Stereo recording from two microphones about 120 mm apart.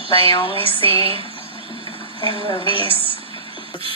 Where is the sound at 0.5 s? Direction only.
50° right (ahead or behind).